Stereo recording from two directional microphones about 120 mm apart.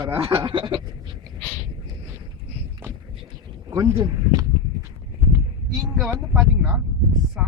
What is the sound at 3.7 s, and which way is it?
Speech, 25° right (ahead or behind).